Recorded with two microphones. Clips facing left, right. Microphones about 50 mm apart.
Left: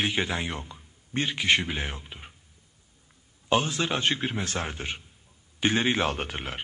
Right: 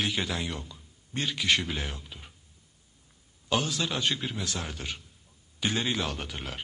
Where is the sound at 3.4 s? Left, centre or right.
Left.